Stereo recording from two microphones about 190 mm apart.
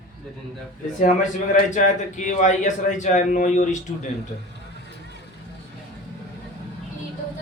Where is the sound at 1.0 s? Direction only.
40° left (ahead or behind).